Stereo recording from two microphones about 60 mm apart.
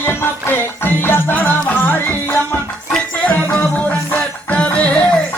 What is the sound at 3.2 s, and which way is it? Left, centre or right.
Music, left.